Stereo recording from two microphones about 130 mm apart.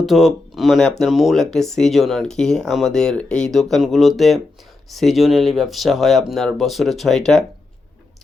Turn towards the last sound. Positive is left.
turn(degrees=5)  # may be behind; listen again after turning